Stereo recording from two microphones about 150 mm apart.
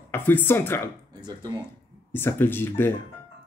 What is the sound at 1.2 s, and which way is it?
Speech, 25° right (ahead or behind).